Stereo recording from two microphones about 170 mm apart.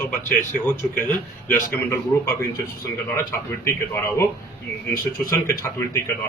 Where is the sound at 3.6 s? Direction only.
15° left (ahead or behind).